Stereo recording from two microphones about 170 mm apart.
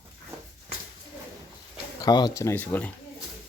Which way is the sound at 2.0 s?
25° left (ahead or behind).